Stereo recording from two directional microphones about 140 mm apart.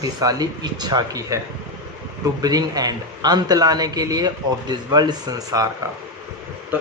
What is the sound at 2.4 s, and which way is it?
A man's voice, 25° right (ahead or behind).